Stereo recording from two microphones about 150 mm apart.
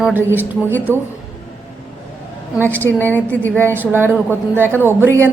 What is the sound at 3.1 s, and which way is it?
Speech, 10° left (ahead or behind).